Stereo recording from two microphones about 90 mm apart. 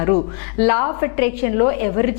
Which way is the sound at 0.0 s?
20° left (ahead or behind).